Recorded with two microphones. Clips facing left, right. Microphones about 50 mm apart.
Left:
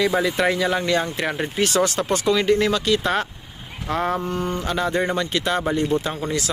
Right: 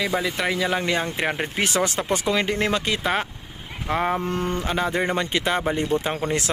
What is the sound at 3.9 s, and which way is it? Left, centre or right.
Speech, centre.